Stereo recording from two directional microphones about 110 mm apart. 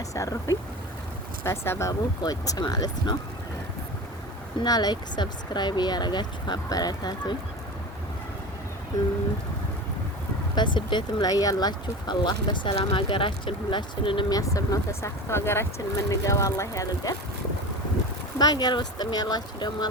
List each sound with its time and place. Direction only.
0.1 s speech: 30° left (ahead or behind)
1.9 s speech: 35° left (ahead or behind)
4.6 s speech: 40° left (ahead or behind)
10.5 s speech: 45° left (ahead or behind)
14.3 s speech: 35° left (ahead or behind)
18.3 s speech: 40° left (ahead or behind)